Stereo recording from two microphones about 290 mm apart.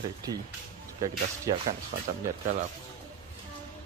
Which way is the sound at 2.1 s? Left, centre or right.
Right.